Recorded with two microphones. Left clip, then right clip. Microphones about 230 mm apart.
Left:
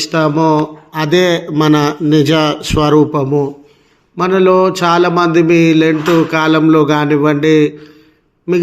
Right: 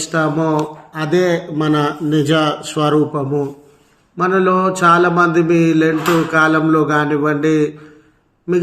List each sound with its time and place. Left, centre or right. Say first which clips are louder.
0.1 s speech: left 4 dB; left